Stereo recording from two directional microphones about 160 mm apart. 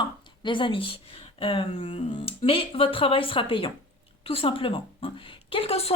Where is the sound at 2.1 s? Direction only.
35° left (ahead or behind).